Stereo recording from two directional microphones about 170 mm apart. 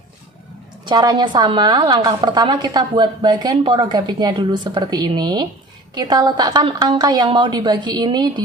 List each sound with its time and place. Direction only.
0.9 s a woman's voice: 25° right (ahead or behind)